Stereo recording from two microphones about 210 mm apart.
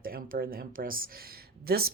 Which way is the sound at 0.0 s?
45° right (ahead or behind).